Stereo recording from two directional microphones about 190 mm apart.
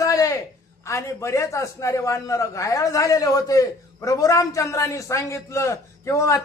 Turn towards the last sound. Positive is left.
turn(degrees=15)  # may be behind; listen again after turning